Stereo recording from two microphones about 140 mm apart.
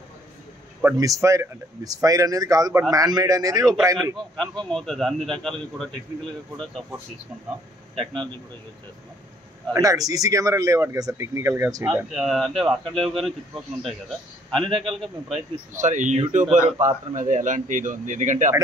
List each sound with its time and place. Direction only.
0.8 s speech: 25° right (ahead or behind)
4.4 s a man's voice: 5° left (ahead or behind)
8.0 s a man's voice: 5° left (ahead or behind)
9.7 s speech: 25° right (ahead or behind)
11.8 s a man's voice: 10° right (ahead or behind)
14.7 s a man's voice: 40° right (ahead or behind)
15.7 s speech: 60° right (ahead or behind)